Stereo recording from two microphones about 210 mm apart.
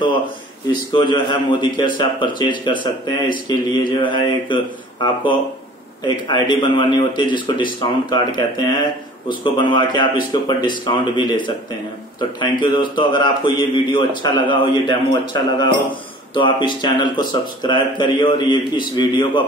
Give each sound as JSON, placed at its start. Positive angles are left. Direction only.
{"t": 0.9, "sound": "a man's voice", "side_deg": 20}
{"t": 6.0, "sound": "a man's voice", "side_deg": 20}
{"t": 15.9, "sound": "a sound", "side_deg": 25}
{"t": 16.6, "sound": "a man's voice", "side_deg": 20}